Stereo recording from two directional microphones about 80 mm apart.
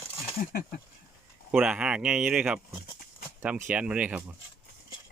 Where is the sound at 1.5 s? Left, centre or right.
Centre.